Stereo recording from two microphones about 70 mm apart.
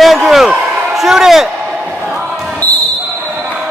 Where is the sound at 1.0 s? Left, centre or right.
Centre.